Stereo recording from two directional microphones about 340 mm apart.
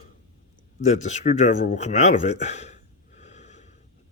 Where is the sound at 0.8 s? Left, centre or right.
Left.